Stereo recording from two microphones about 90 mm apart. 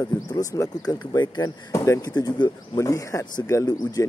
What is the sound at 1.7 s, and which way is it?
Speech, 35° left (ahead or behind).